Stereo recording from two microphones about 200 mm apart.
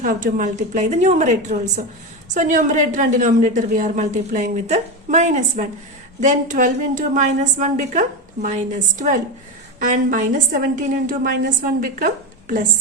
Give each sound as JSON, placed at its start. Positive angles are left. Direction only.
{"t": 0.0, "sound": "a woman's voice", "side_deg": -45}